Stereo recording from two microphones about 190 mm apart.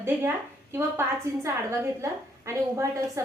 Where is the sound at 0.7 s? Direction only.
15° right (ahead or behind).